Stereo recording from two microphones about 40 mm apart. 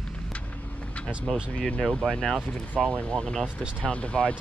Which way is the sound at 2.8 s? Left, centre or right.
Centre.